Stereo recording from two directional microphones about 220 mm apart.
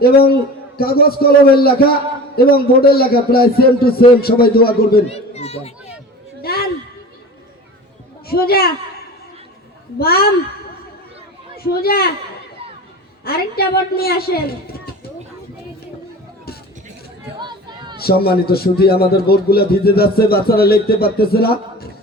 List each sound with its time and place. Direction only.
0.8 s a man's voice: 45° left (ahead or behind)
5.0 s a child's voice: 30° left (ahead or behind)
6.4 s a sound: 45° left (ahead or behind)
8.3 s a man's voice: 45° left (ahead or behind)
10.0 s a man's voice: 45° left (ahead or behind)
11.5 s speech: 45° left (ahead or behind)
13.2 s a man's voice: 45° left (ahead or behind)
17.4 s a sound: 20° right (ahead or behind)
17.9 s a man's voice: 45° left (ahead or behind)